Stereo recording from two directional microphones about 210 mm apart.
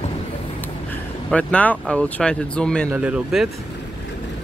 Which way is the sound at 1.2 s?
5° left (ahead or behind).